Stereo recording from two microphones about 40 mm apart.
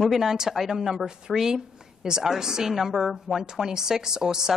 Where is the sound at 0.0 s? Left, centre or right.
Centre.